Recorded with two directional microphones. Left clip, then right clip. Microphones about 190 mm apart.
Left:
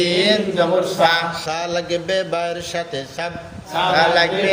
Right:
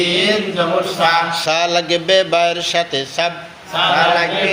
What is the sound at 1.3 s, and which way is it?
Speech, 25° right (ahead or behind).